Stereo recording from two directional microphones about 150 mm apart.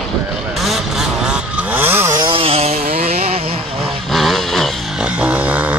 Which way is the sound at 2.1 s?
35° right (ahead or behind).